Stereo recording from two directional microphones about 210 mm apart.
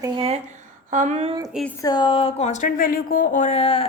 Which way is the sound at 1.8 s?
20° left (ahead or behind).